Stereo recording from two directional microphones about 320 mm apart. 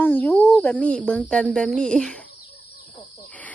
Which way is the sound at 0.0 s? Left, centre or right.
Centre.